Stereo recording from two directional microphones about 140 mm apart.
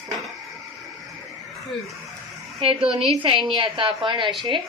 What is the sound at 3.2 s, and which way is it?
A woman's voice, 35° right (ahead or behind).